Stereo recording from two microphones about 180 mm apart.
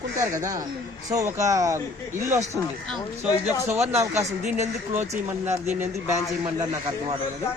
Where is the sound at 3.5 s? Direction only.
15° right (ahead or behind).